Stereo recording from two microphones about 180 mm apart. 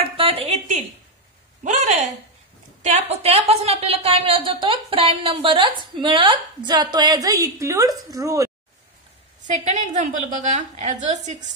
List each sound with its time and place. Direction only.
0.0 s a sound: 30° right (ahead or behind)
2.8 s a woman's voice: 40° right (ahead or behind); by 8.5 s 20° right (ahead or behind)
9.5 s a woman's voice: 40° right (ahead or behind)